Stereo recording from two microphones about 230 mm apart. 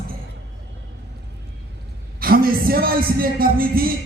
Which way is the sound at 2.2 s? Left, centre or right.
Right.